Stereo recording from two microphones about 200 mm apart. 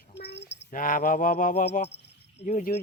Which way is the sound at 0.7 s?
45° left (ahead or behind).